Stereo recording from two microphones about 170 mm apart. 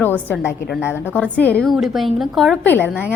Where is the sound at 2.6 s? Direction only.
10° left (ahead or behind).